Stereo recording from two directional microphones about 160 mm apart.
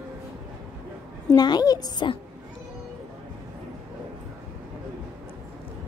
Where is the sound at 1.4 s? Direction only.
25° left (ahead or behind).